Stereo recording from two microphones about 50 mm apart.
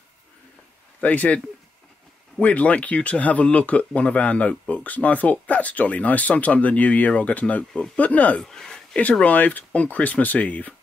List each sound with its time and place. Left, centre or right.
1.0 s speech: left
2.4 s speech: left
8.4 s speech: centre
9.2 s speech: left